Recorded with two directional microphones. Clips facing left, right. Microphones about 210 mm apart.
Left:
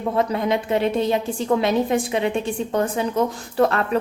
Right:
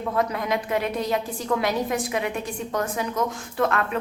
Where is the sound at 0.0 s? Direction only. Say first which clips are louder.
Left 4 dB; 30° left (ahead or behind).